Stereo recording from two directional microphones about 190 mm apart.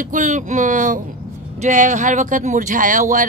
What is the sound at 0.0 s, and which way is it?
A woman's voice, 40° right (ahead or behind).